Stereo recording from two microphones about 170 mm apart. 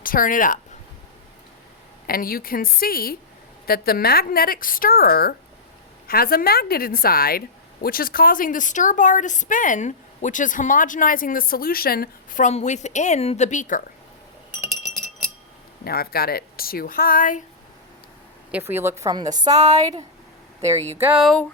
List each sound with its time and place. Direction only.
0.0 s speech: 55° left (ahead or behind)
2.0 s a woman's voice: 60° left (ahead or behind)
15.8 s a woman's voice: 65° left (ahead or behind)
18.5 s a woman's voice: 10° right (ahead or behind)
21.0 s speech: 10° right (ahead or behind)